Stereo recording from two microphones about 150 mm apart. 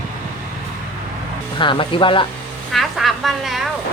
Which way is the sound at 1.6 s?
35° left (ahead or behind).